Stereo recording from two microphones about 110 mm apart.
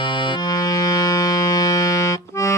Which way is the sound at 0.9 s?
35° left (ahead or behind).